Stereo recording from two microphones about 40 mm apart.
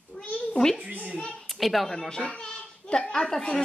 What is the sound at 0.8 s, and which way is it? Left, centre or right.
Speech, right.